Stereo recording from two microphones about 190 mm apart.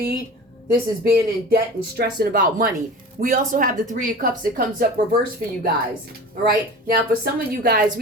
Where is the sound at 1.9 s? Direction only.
55° right (ahead or behind).